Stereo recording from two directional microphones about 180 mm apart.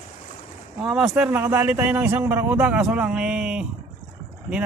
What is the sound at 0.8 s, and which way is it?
A man's voice, 5° right (ahead or behind).